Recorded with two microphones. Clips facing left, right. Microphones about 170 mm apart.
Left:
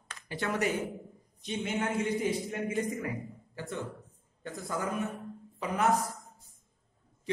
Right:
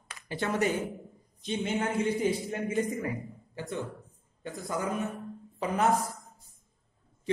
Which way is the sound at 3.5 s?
15° right (ahead or behind).